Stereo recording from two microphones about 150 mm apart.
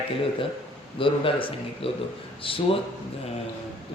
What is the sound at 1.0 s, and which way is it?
A man's voice, 35° left (ahead or behind).